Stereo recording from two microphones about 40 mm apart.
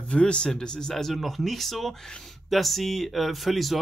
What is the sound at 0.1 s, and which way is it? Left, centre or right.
Speech, left.